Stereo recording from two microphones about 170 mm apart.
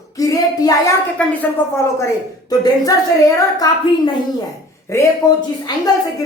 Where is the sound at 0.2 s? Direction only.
20° left (ahead or behind).